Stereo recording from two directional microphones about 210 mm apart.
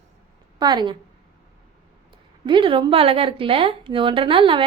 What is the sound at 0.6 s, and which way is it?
Speech, 20° right (ahead or behind).